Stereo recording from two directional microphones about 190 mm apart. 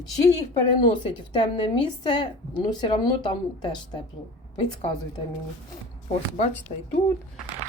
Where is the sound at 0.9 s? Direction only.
25° left (ahead or behind).